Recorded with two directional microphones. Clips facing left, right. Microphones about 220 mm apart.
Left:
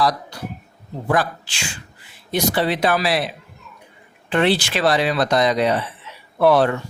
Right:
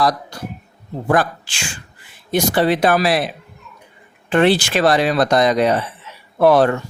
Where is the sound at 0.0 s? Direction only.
45° right (ahead or behind).